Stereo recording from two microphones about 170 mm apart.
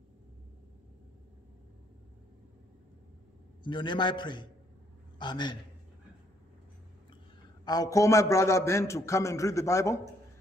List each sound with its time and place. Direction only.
3.6 s a man's voice: 25° left (ahead or behind)
7.6 s a man's voice: 20° left (ahead or behind)